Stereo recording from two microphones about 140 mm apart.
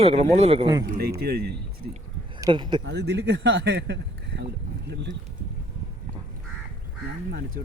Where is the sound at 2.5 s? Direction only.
35° right (ahead or behind).